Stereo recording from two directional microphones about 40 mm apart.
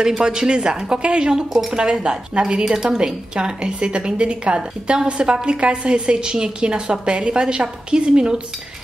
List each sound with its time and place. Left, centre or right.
0.2 s a woman's voice: right
1.5 s a woman's voice: centre